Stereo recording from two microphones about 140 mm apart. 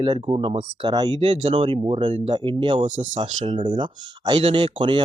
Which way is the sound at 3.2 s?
35° right (ahead or behind).